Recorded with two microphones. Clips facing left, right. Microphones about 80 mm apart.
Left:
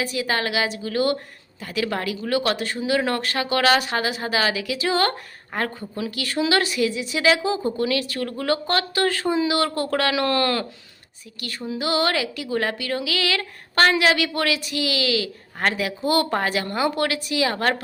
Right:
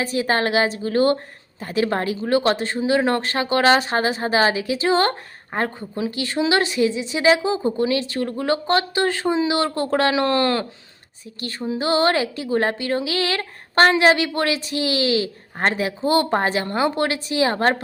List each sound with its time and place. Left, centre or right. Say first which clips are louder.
0.0 s a woman's voice: right 4 dB; right